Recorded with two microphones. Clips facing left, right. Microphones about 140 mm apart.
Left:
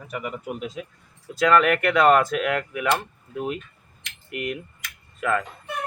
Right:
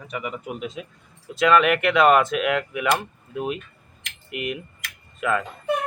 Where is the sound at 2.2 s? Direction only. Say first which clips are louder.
Right 1 dB; 20° right (ahead or behind).